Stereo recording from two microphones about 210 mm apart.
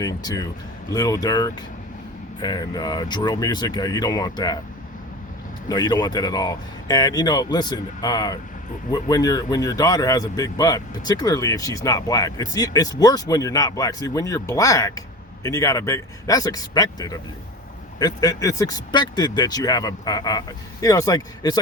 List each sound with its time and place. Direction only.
0.0 s speech: 15° left (ahead or behind)
5.6 s speech: 20° left (ahead or behind)